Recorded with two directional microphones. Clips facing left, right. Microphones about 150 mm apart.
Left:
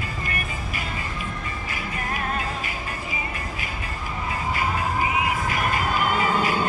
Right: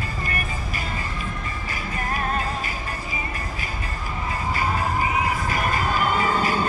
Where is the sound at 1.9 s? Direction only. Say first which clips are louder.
Right 3 dB; 40° right (ahead or behind).